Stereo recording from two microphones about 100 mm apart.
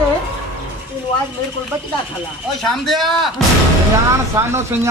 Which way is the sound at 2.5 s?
5° left (ahead or behind).